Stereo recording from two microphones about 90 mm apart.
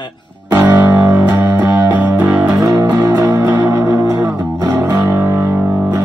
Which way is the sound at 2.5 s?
45° right (ahead or behind).